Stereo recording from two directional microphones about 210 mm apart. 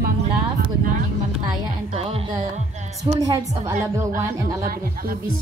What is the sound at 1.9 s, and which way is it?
Speech, 30° right (ahead or behind).